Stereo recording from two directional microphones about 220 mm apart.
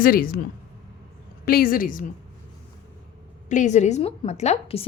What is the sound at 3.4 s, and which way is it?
A woman's voice, 35° left (ahead or behind).